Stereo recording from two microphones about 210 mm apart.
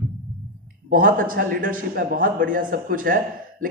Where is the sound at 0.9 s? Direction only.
40° right (ahead or behind).